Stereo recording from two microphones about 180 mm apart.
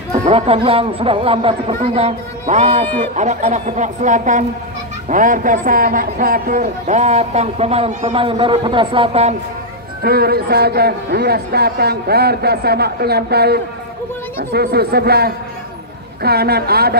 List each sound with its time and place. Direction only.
0.1 s a man's voice: 35° right (ahead or behind)
10.0 s a man's voice: 60° right (ahead or behind)